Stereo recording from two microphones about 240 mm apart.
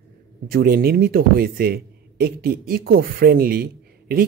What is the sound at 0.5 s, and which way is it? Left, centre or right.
Speech, right.